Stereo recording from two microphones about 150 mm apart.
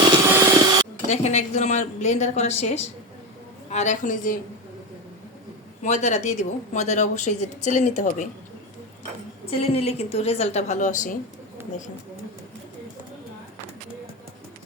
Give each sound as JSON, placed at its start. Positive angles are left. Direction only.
{"t": 0.4, "sound": "a sound", "side_deg": -25}
{"t": 1.0, "sound": "a woman's voice", "side_deg": 50}
{"t": 5.8, "sound": "speech", "side_deg": 50}
{"t": 9.6, "sound": "speech", "side_deg": 45}